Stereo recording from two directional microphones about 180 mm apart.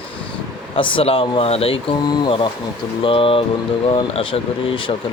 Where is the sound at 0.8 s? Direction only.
30° left (ahead or behind).